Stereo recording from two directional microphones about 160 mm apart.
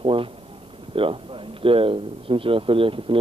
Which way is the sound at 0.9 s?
35° right (ahead or behind).